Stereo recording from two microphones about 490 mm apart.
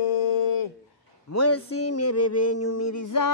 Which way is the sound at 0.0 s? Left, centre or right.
Left.